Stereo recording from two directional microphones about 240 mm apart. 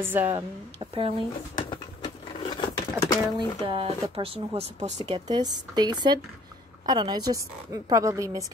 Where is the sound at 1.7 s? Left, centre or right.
Centre.